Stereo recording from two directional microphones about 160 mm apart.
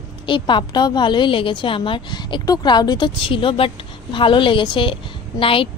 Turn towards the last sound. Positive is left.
turn(degrees=35)  # may be behind; listen again after turning